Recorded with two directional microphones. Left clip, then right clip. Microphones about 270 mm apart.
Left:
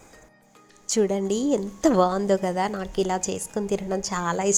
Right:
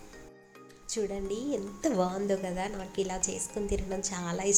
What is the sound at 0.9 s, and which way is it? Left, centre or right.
Speech, left.